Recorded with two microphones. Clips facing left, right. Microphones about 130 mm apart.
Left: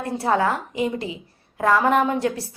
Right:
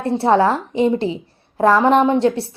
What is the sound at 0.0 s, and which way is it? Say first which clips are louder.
A woman's voice: right 6 dB; 30° right (ahead or behind).